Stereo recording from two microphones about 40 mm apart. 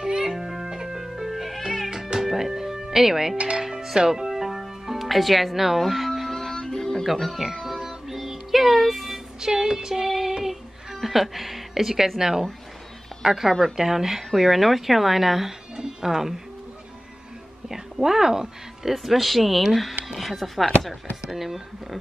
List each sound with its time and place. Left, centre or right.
0.2 s music: centre
1.9 s music: centre
3.3 s speech: right
3.8 s music: centre
9.4 s music: centre
10.0 s child singing: centre
10.3 s music: centre
12.2 s speech: centre
15.7 s music: centre
17.6 s speech: centre